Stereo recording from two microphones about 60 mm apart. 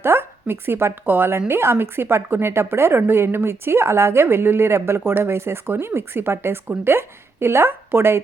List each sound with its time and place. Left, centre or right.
0.0 s speech: right